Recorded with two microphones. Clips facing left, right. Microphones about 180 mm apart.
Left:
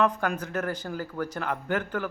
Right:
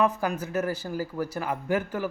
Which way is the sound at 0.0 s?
5° right (ahead or behind).